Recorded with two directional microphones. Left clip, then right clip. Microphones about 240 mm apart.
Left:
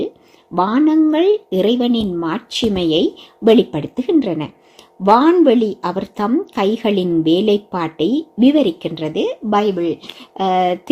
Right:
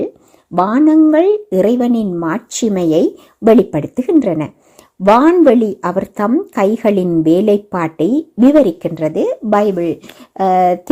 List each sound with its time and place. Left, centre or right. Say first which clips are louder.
0.5 s a woman's voice: right 4 dB; right